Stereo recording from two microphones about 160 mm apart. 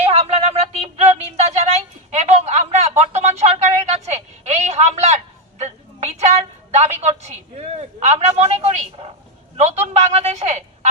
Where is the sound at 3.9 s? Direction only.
45° right (ahead or behind).